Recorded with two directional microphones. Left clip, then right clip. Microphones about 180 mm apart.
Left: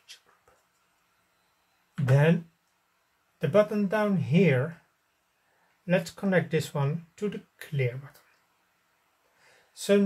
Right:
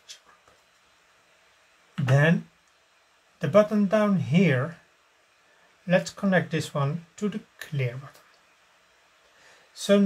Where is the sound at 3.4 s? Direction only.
35° left (ahead or behind).